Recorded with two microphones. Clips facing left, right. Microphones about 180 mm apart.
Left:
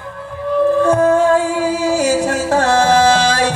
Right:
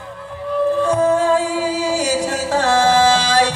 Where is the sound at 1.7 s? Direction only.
50° left (ahead or behind).